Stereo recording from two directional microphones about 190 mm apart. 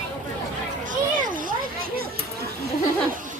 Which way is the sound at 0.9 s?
45° right (ahead or behind).